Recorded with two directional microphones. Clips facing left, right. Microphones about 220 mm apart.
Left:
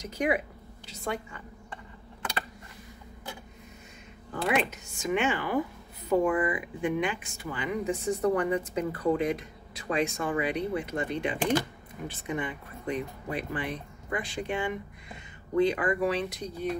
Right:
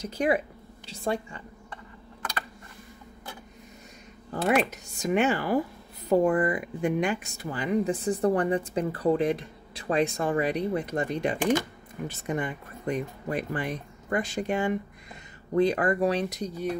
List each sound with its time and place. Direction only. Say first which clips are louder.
0.0 s speech: right 3 dB; 30° right (ahead or behind)
4.3 s speech: right 3 dB; 40° right (ahead or behind)